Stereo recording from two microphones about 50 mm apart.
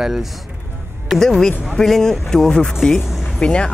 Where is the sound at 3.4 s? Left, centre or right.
Centre.